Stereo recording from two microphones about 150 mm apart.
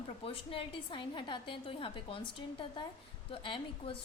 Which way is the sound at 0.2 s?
40° left (ahead or behind).